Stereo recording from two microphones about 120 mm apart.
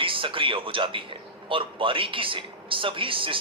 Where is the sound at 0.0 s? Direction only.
45° right (ahead or behind).